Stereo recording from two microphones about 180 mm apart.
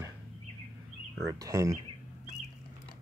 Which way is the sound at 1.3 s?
20° right (ahead or behind).